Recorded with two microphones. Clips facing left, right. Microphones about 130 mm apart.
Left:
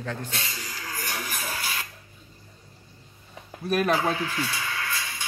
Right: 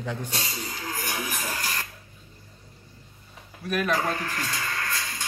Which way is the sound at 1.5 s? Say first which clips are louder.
Right 1 dB; 10° left (ahead or behind).